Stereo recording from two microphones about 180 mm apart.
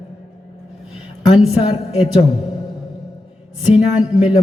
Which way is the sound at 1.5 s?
35° left (ahead or behind).